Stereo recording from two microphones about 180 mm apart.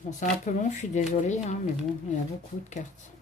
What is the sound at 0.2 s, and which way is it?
Speech, 40° left (ahead or behind).